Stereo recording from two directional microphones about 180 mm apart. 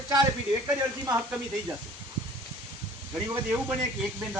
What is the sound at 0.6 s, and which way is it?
Speech, 15° right (ahead or behind).